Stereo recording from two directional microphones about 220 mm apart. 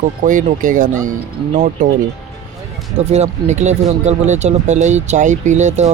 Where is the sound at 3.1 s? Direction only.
30° right (ahead or behind).